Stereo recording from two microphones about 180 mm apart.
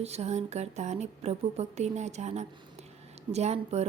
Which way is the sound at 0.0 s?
35° right (ahead or behind).